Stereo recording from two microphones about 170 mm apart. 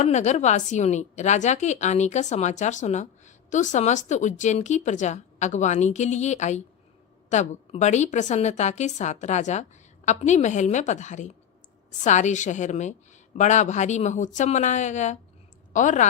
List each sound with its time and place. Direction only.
0.0 s a woman's voice: 45° left (ahead or behind)